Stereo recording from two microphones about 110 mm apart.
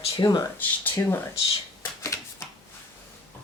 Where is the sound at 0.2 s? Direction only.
40° left (ahead or behind).